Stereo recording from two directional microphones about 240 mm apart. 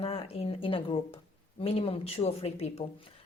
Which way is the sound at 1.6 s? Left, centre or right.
Left.